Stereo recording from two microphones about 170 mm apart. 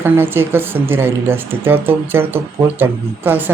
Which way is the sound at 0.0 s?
15° right (ahead or behind).